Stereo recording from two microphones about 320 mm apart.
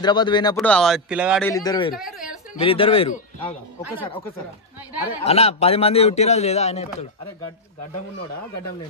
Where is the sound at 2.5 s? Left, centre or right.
Centre.